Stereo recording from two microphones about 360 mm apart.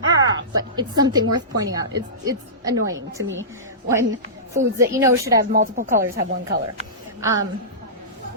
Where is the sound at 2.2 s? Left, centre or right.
Centre.